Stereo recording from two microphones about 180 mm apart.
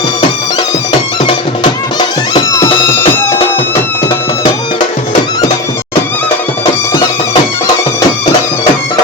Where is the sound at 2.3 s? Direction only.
20° left (ahead or behind).